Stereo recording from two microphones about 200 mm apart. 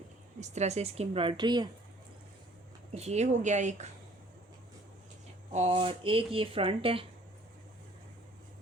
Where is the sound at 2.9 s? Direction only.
30° right (ahead or behind).